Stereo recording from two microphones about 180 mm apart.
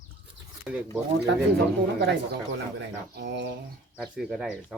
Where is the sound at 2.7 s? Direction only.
80° right.